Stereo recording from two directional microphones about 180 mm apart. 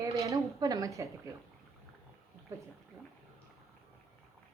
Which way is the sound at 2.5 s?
15° right (ahead or behind).